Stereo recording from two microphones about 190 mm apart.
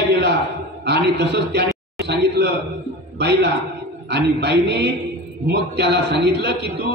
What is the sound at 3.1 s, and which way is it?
A man's voice, 65° right (ahead or behind).